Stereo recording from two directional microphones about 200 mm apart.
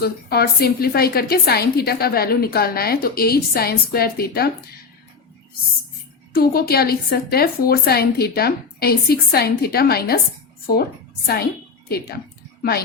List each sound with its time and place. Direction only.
0.0 s a woman's voice: 50° left (ahead or behind)
6.3 s a woman's voice: 50° left (ahead or behind)
11.9 s speech: 50° left (ahead or behind)